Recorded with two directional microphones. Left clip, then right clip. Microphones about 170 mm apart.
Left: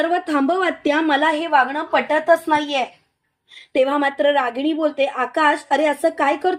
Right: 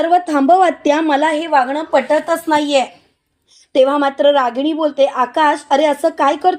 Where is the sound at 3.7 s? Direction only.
25° right (ahead or behind).